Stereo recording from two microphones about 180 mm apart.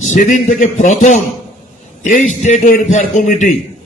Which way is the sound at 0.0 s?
45° left (ahead or behind).